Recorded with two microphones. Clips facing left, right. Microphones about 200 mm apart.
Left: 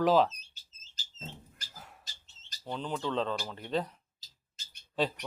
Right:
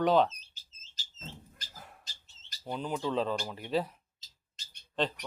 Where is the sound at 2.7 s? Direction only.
10° right (ahead or behind).